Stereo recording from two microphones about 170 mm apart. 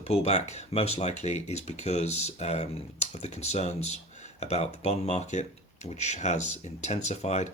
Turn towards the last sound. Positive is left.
turn(degrees=40)  # may be behind; listen again after turning